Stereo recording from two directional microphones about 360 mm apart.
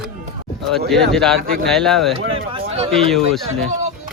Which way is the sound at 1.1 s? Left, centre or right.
Centre.